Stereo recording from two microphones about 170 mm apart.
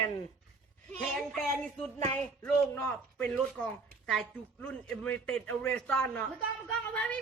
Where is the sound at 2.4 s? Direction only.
5° left (ahead or behind).